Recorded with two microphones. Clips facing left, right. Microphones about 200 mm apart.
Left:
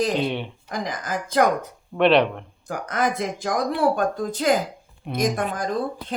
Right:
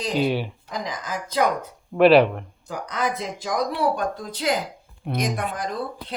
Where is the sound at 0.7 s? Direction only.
50° left (ahead or behind).